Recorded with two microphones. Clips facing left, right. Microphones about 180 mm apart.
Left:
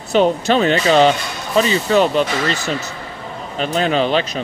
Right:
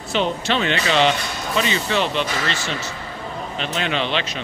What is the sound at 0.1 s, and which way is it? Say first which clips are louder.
Speech: left 7 dB; 40° left (ahead or behind).